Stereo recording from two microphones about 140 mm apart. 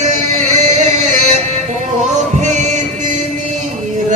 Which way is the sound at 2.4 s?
60° right (ahead or behind).